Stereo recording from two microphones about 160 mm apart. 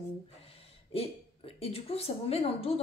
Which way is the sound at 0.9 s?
40° left (ahead or behind).